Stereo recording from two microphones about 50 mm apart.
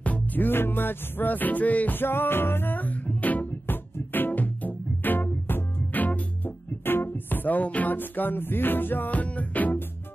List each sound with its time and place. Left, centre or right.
0.0 s music: left
6.8 s music: left
9.1 s music: left